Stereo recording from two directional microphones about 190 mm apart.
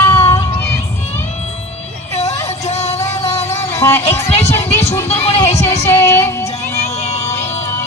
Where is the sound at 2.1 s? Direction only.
35° left (ahead or behind).